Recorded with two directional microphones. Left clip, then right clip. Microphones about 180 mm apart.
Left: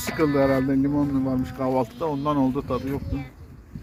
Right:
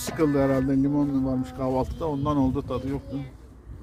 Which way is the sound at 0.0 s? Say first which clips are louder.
Left 2 dB; 20° left (ahead or behind).